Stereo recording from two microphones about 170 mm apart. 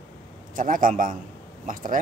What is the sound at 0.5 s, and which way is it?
Speech, 50° right (ahead or behind).